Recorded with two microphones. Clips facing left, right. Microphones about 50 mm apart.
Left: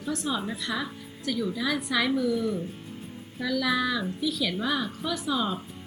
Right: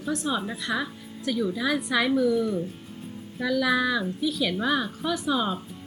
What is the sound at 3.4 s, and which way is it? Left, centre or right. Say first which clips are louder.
Speech: right 3 dB; centre.